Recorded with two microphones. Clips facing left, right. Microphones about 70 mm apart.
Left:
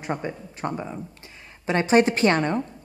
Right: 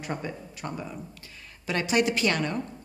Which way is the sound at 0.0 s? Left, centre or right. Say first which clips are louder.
Left 4 dB; left.